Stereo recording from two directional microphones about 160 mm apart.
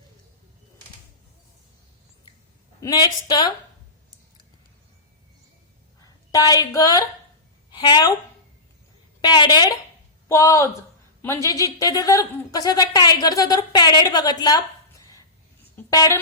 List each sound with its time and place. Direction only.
2.8 s speech: 25° left (ahead or behind)
6.3 s a woman's voice: 25° left (ahead or behind)
9.2 s speech: 25° left (ahead or behind)
15.7 s a sound: 20° left (ahead or behind)